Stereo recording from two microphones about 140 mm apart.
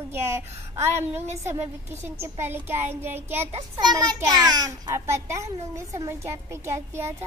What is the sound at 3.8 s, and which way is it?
A child's voice, 25° right (ahead or behind).